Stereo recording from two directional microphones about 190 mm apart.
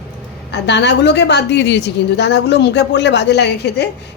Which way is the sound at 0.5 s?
65° left (ahead or behind).